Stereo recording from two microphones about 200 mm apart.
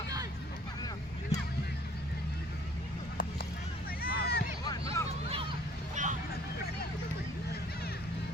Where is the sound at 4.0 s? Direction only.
50° left (ahead or behind).